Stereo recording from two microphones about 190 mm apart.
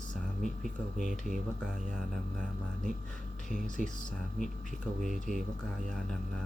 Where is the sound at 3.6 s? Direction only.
45° left (ahead or behind).